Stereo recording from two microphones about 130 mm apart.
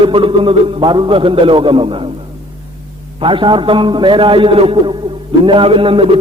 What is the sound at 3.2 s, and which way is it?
A man's voice, 40° right (ahead or behind).